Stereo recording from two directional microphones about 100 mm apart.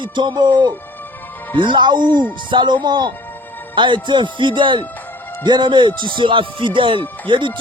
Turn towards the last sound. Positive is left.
turn(degrees=-55)  # may be behind; listen again after turning